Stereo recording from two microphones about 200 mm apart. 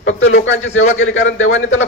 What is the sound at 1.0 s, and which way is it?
Speech, 75° left (ahead or behind).